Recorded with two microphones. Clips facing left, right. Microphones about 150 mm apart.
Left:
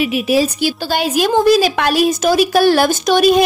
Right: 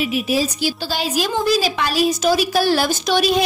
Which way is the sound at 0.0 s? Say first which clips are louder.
Left 5 dB; 70° left (ahead or behind).